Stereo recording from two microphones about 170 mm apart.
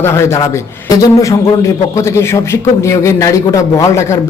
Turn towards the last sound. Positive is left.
turn(degrees=15)  # may be behind; listen again after turning